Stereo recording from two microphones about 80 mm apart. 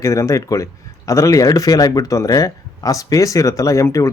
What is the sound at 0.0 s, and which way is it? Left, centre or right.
A man's voice, left.